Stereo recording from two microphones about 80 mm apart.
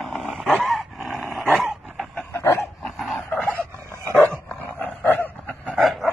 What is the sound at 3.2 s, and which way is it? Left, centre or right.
Dog, centre.